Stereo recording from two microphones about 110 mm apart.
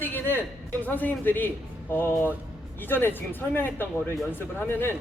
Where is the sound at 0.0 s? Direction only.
20° left (ahead or behind).